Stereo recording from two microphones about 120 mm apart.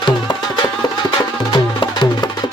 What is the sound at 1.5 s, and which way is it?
Music, 40° left (ahead or behind).